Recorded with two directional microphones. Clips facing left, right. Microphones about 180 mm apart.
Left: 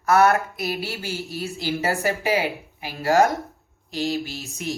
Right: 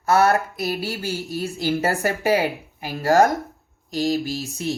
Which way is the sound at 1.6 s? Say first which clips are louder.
Right 2 dB; 45° right (ahead or behind).